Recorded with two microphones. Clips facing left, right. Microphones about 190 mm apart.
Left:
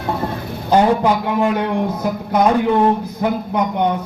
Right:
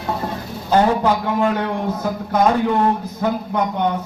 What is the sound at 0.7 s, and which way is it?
A man's voice, 15° left (ahead or behind).